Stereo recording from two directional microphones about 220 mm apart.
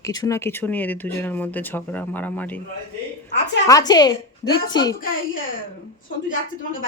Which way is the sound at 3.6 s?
15° left (ahead or behind).